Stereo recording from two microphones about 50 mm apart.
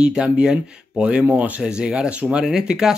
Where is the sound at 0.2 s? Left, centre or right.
Centre.